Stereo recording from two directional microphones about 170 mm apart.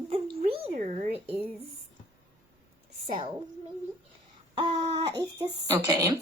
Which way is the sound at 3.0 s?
30° right (ahead or behind).